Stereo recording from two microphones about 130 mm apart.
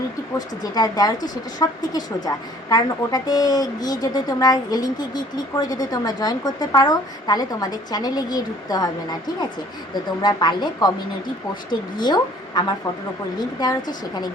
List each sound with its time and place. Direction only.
0.3 s a woman's voice: 30° left (ahead or behind)